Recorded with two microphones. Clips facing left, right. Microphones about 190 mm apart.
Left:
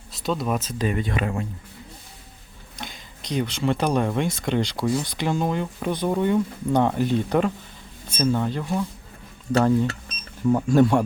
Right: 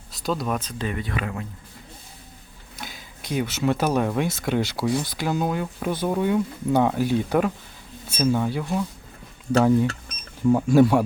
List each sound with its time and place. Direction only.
0.1 s speech: centre (ahead or behind)
0.8 s speech: 20° left (ahead or behind)
2.7 s speech: 5° right (ahead or behind)